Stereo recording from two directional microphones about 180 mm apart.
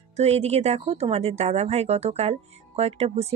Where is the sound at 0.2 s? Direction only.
35° right (ahead or behind).